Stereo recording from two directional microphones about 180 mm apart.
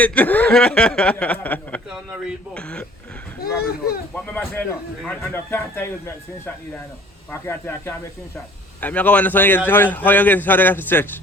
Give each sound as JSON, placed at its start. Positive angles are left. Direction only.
{"t": 0.0, "sound": "speech", "side_deg": 10}
{"t": 1.9, "sound": "speech", "side_deg": -5}
{"t": 3.4, "sound": "speech", "side_deg": 55}
{"t": 4.1, "sound": "speech", "side_deg": 10}
{"t": 7.3, "sound": "speech", "side_deg": 10}